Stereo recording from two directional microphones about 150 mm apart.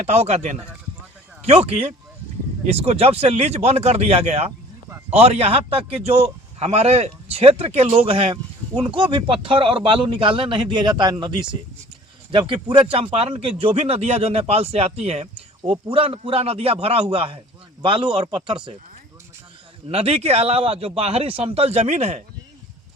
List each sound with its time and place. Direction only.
0.0 s a man's voice: 45° right (ahead or behind)
19.9 s a man's voice: 40° right (ahead or behind)